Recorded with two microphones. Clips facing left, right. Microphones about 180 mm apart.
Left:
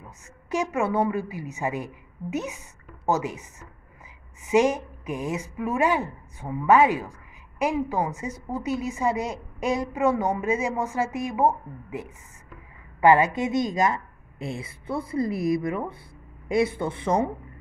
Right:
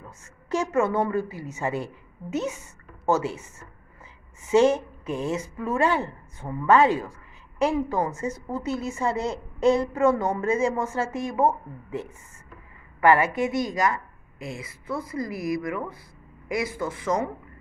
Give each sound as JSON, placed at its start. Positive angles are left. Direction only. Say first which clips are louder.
{"t": 0.0, "sound": "a woman's voice", "louder": "right 1 dB", "side_deg": 15}